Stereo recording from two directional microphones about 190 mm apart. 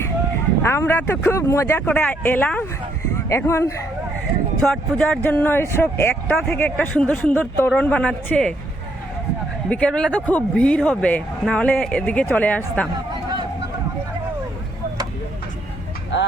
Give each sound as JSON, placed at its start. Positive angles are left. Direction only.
{"t": 0.6, "sound": "speech", "side_deg": 15}
{"t": 9.6, "sound": "speech", "side_deg": 5}
{"t": 16.1, "sound": "a sound", "side_deg": 70}